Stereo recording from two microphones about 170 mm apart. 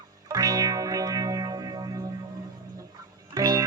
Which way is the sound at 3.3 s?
20° right (ahead or behind).